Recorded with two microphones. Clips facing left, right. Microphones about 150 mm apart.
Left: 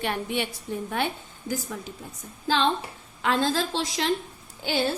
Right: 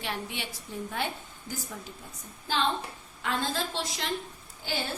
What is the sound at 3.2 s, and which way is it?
Speech, 90° left.